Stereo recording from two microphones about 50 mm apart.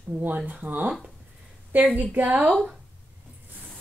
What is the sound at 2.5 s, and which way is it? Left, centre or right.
Speech, centre.